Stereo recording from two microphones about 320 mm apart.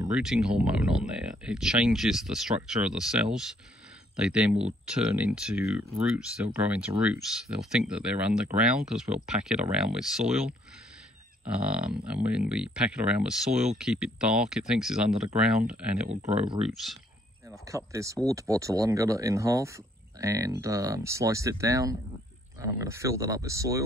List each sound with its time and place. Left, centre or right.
0.0 s speech: centre
11.7 s speech: centre
16.1 s speech: centre
16.7 s speech: centre